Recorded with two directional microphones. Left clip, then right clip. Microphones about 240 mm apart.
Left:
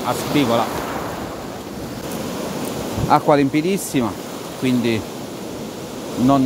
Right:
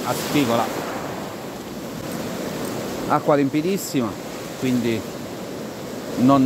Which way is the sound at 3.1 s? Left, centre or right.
Centre.